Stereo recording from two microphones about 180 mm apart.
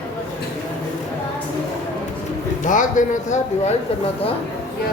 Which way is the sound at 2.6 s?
45° left (ahead or behind).